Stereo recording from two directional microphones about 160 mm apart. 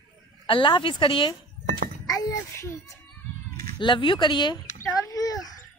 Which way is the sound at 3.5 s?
30° left (ahead or behind).